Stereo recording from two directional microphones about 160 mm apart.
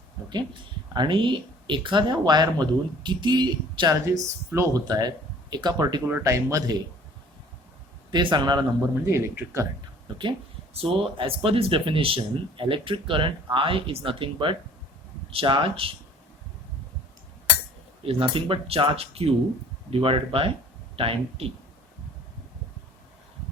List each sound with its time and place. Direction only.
0.9 s speech: 30° right (ahead or behind)
8.1 s speech: 30° right (ahead or behind)
9.0 s speech: 15° right (ahead or behind)
10.8 s speech: 35° right (ahead or behind)
18.0 s speech: 35° right (ahead or behind)